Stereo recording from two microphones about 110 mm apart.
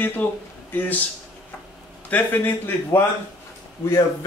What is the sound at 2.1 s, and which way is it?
A man's voice, 15° left (ahead or behind).